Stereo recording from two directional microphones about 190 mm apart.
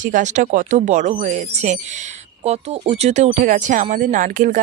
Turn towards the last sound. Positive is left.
turn(degrees=-45)  # may be behind; listen again after turning